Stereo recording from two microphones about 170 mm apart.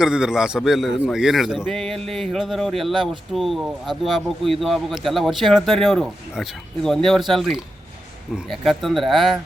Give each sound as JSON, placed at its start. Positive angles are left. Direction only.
{"t": 0.0, "sound": "speech", "side_deg": -5}